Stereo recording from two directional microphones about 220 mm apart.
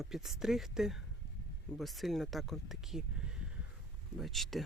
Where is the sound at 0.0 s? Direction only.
Centre (ahead or behind).